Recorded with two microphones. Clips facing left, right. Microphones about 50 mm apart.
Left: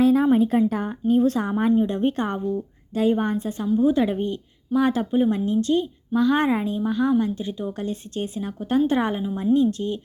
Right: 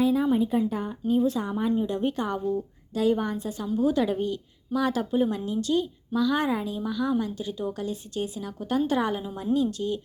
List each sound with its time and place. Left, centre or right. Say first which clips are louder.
0.0 s speech: left 5 dB; left
1.0 s a woman's voice: left 4 dB; left
1.7 s a woman's voice: left 5 dB; left